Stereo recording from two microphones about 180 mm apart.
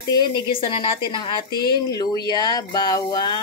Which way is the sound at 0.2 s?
30° left (ahead or behind).